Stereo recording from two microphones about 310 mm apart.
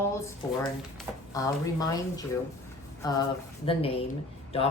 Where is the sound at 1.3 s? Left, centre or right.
Centre.